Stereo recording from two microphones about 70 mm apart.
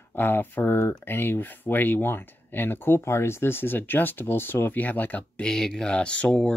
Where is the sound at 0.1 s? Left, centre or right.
Left.